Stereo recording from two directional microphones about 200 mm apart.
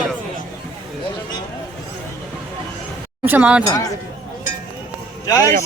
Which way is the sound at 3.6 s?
15° left (ahead or behind).